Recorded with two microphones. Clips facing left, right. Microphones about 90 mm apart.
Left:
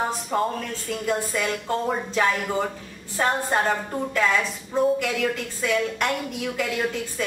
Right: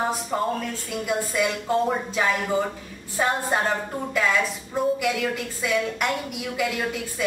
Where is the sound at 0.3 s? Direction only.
5° right (ahead or behind).